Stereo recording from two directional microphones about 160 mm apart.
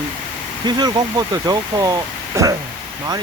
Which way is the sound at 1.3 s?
20° right (ahead or behind).